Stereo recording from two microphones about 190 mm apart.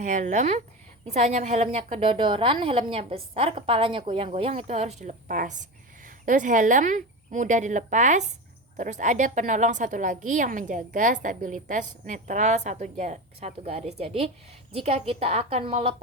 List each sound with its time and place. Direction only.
0.0 s a woman's voice: 40° right (ahead or behind)